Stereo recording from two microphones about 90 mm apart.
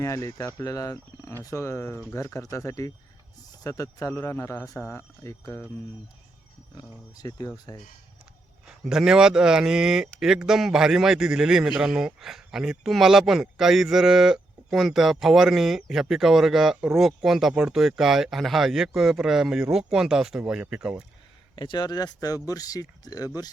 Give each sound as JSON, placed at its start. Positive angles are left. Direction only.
{"t": 0.0, "sound": "speech", "side_deg": 35}
{"t": 4.6, "sound": "speech", "side_deg": 0}
{"t": 4.9, "sound": "speech", "side_deg": 30}
{"t": 6.7, "sound": "speech", "side_deg": 45}
{"t": 7.7, "sound": "speech", "side_deg": 30}
{"t": 8.6, "sound": "speech", "side_deg": -5}
{"t": 21.5, "sound": "speech", "side_deg": 55}